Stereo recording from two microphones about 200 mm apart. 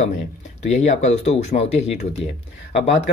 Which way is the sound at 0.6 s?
35° left (ahead or behind).